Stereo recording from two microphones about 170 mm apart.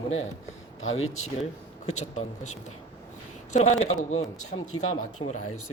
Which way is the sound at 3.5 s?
40° left (ahead or behind).